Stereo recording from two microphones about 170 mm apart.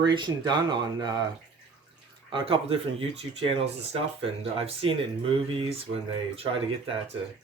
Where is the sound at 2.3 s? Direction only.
30° right (ahead or behind).